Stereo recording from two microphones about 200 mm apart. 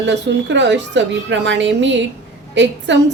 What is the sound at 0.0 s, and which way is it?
A woman's voice, 65° right (ahead or behind).